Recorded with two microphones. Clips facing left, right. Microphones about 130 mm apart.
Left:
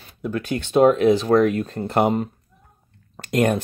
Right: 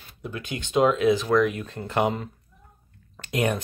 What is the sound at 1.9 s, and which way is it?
Speech, 55° left (ahead or behind).